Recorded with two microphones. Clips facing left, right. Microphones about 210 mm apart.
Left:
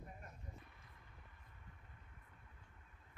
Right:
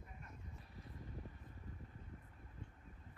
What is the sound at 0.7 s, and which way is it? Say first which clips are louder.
Vehicle: right 12 dB; 35° right (ahead or behind).